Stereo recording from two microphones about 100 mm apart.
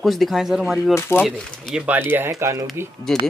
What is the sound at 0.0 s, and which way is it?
Speech, centre (ahead or behind).